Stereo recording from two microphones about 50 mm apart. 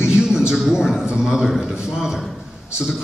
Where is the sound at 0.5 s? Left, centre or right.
Centre.